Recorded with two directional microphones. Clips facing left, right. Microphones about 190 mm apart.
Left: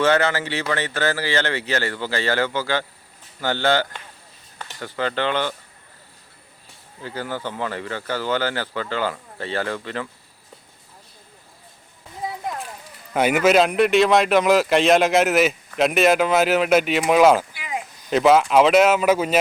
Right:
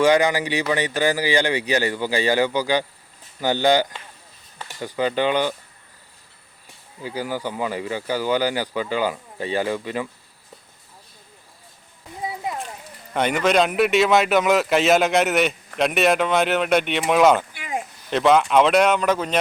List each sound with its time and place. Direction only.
0.0 s speech: 15° right (ahead or behind)
7.0 s speech: 10° right (ahead or behind)
12.2 s a sound: centre (ahead or behind)
13.1 s a man's voice: 5° left (ahead or behind)
17.5 s a sound: 45° right (ahead or behind)
18.1 s a man's voice: 5° left (ahead or behind)